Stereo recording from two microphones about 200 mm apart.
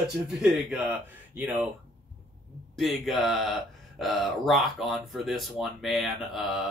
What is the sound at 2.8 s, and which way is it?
Speech, centre (ahead or behind).